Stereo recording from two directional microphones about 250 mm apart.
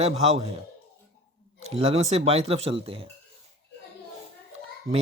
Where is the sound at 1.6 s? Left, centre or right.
Right.